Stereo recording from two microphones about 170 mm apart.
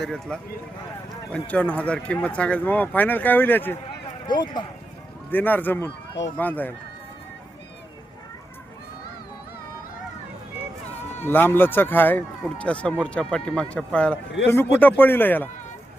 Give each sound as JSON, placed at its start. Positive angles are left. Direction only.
{"t": 0.0, "sound": "speech", "side_deg": 5}
{"t": 4.3, "sound": "speech", "side_deg": 25}
{"t": 5.3, "sound": "speech", "side_deg": 10}
{"t": 11.2, "sound": "speech", "side_deg": 10}